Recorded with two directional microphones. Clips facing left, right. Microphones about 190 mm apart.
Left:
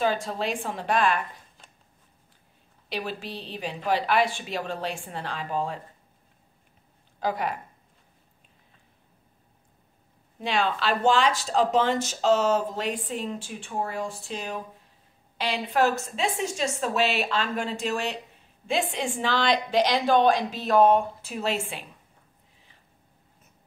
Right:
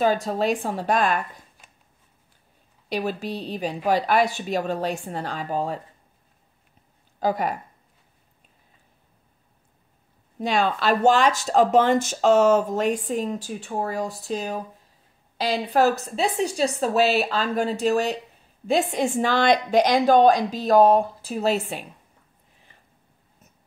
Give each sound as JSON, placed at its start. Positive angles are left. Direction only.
{"t": 0.0, "sound": "a woman's voice", "side_deg": -45}
{"t": 2.9, "sound": "speech", "side_deg": -45}
{"t": 7.2, "sound": "speech", "side_deg": -40}
{"t": 10.4, "sound": "a woman's voice", "side_deg": -45}